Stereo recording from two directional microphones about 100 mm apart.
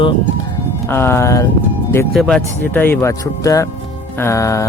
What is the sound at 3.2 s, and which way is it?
Speech, 35° left (ahead or behind).